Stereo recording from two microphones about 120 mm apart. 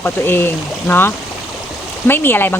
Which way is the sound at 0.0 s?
20° left (ahead or behind).